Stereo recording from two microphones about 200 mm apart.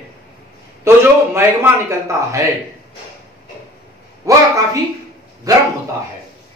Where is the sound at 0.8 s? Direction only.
15° right (ahead or behind).